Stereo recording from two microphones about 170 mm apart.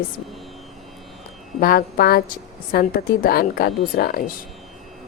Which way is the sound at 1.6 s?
60° left (ahead or behind).